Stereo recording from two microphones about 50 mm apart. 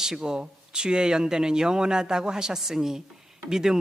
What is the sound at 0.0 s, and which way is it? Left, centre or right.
A woman's voice, centre.